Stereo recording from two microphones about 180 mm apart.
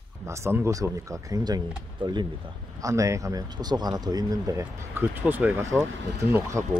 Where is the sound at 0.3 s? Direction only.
15° right (ahead or behind).